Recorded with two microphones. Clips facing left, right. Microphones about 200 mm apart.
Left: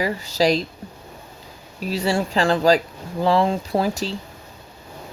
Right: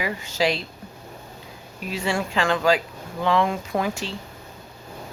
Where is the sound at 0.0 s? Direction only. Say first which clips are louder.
Left 4 dB; 35° left (ahead or behind).